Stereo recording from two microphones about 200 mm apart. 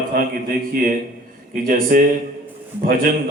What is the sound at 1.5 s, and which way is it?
Speech, 45° right (ahead or behind).